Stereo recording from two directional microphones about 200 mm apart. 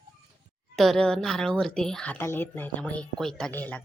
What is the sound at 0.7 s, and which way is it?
A woman's voice, centre (ahead or behind).